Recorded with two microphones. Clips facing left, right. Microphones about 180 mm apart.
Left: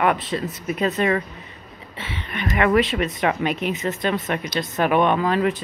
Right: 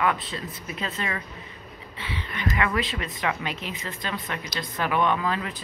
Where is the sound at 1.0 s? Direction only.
55° left (ahead or behind).